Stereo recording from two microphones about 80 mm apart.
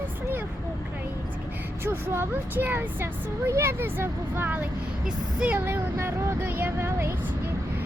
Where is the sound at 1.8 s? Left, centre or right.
Right.